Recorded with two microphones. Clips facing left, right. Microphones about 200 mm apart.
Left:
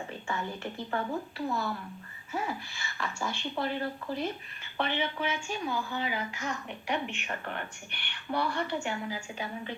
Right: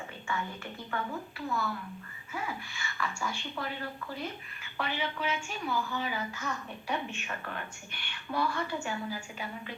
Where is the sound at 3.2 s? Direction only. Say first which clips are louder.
Left 3 dB; 25° left (ahead or behind).